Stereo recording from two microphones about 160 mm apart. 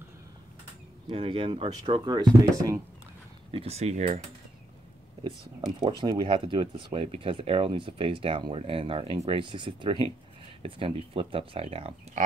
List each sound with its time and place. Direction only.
1.0 s speech: 35° right (ahead or behind)
3.5 s speech: 40° right (ahead or behind)
5.8 s speech: 25° right (ahead or behind)